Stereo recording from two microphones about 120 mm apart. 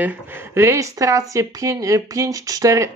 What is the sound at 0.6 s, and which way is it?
Speech, 25° right (ahead or behind).